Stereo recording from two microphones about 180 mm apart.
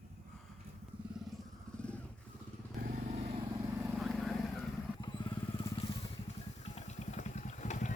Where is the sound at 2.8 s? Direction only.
50° right (ahead or behind).